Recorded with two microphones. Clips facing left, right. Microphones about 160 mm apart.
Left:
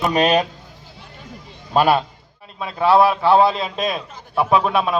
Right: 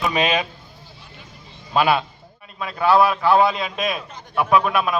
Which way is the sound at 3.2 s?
30° left (ahead or behind).